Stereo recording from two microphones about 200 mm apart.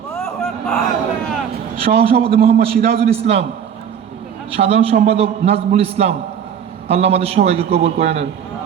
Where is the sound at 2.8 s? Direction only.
55° right (ahead or behind).